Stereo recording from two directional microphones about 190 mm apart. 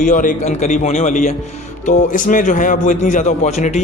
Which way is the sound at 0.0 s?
45° left (ahead or behind).